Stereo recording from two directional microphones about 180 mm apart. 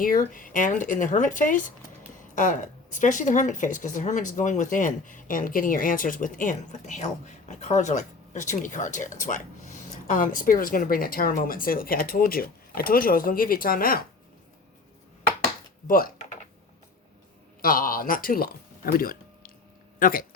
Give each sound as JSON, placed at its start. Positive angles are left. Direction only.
{"t": 0.0, "sound": "a woman's voice", "side_deg": 50}
{"t": 17.6, "sound": "speech", "side_deg": 50}